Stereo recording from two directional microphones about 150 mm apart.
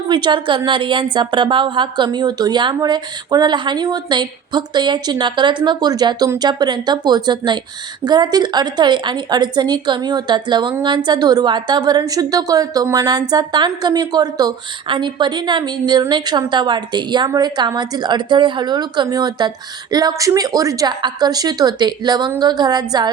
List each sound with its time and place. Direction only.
0.1 s a woman's voice: 30° right (ahead or behind)